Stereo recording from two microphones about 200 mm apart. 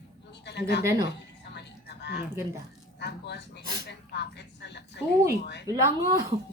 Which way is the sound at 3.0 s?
60° left (ahead or behind).